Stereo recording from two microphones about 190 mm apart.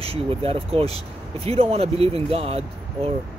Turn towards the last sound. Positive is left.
turn(degrees=-30)  # may be behind; listen again after turning